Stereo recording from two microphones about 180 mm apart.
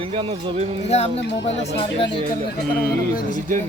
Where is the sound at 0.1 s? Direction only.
30° right (ahead or behind).